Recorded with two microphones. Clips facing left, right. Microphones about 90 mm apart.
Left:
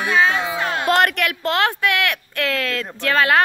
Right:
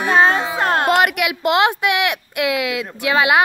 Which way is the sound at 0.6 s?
50° right (ahead or behind).